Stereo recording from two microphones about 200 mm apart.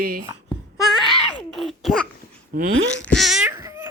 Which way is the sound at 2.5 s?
45° right (ahead or behind).